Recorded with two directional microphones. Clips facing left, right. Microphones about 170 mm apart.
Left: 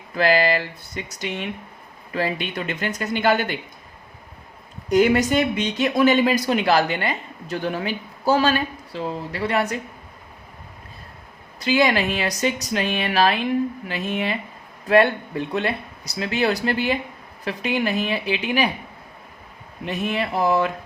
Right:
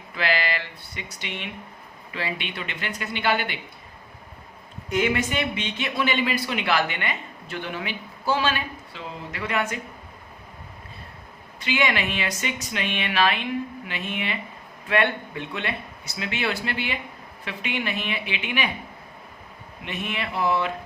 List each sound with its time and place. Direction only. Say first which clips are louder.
0.1 s a man's voice: left 8 dB; 40° left (ahead or behind)
4.9 s speech: left 7 dB; 40° left (ahead or behind)
11.6 s speech: left 6 dB; 35° left (ahead or behind)
19.8 s speech: left 6 dB; 40° left (ahead or behind)